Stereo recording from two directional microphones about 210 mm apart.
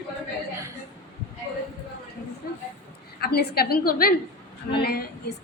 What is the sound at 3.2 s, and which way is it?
A woman's voice, 50° left (ahead or behind).